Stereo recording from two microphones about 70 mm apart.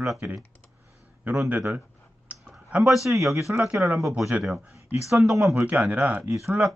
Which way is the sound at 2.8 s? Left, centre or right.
Centre.